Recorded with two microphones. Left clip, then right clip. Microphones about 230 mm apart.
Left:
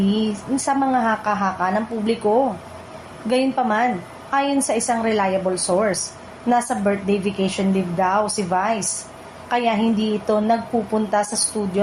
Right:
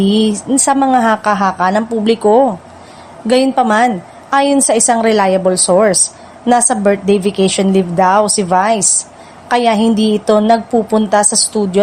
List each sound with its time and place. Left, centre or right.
0.1 s a woman's voice: right